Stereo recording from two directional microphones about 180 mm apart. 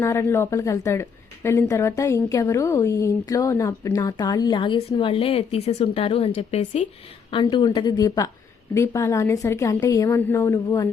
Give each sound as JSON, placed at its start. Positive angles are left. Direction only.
{"t": 0.0, "sound": "a woman's voice", "side_deg": 15}
{"t": 7.3, "sound": "a woman's voice", "side_deg": 25}